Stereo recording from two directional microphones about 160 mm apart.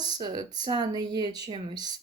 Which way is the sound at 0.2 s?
25° right (ahead or behind).